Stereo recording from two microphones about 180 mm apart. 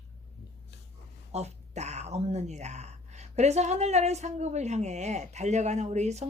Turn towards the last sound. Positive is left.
turn(degrees=-40)  # may be behind; listen again after turning